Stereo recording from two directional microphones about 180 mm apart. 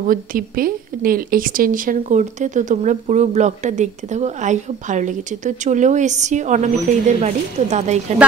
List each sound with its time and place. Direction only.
0.1 s a woman's voice: 50° right (ahead or behind)